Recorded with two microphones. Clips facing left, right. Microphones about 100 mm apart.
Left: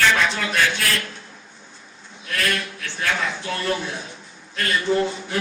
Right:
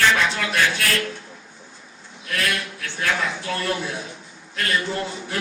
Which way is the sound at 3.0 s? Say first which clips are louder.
Even; centre (ahead or behind).